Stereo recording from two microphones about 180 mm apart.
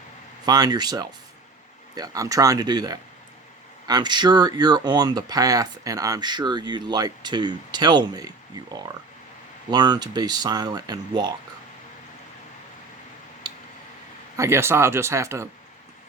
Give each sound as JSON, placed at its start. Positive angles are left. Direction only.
{"t": 0.4, "sound": "speech", "side_deg": -20}
{"t": 14.3, "sound": "speech", "side_deg": -15}